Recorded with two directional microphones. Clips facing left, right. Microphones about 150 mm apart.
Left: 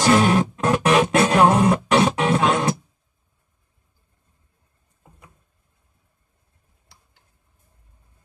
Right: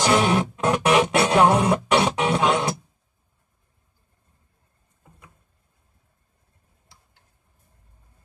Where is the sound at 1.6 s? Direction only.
20° right (ahead or behind).